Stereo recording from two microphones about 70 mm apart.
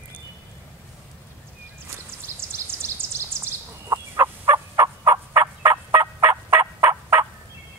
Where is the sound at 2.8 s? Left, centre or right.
Right.